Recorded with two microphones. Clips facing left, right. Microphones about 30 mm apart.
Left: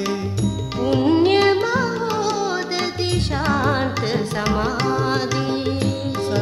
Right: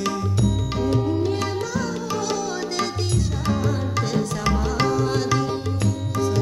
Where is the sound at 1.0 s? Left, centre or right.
Left.